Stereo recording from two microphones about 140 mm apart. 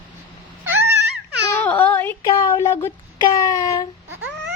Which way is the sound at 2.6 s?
20° left (ahead or behind).